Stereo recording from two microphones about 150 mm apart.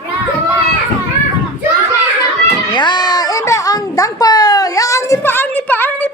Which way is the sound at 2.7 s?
30° left (ahead or behind).